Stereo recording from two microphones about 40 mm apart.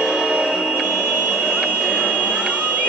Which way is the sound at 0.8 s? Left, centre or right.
Right.